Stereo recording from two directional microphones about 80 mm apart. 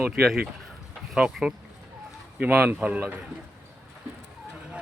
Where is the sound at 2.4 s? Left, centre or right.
Right.